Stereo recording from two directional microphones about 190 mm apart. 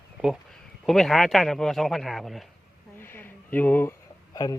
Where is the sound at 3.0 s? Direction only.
10° left (ahead or behind).